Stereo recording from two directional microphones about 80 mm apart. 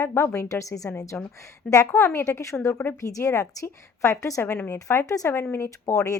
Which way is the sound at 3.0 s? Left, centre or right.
Left.